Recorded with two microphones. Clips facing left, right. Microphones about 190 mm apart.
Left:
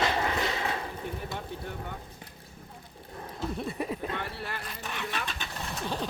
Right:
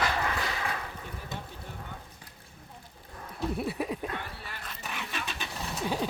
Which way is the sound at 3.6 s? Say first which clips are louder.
Even; 5° right (ahead or behind).